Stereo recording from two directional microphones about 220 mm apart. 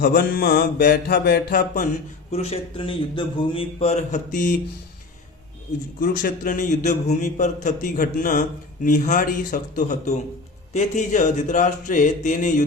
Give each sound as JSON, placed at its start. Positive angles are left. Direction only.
{"t": 0.0, "sound": "a man's voice", "side_deg": 45}
{"t": 2.3, "sound": "a man's voice", "side_deg": 30}
{"t": 6.0, "sound": "a man's voice", "side_deg": 40}